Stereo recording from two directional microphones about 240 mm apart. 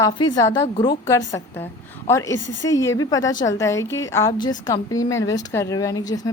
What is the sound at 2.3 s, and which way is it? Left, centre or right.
Speech, left.